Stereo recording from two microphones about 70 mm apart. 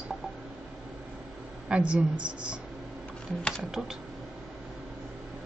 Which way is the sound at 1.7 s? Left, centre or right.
Centre.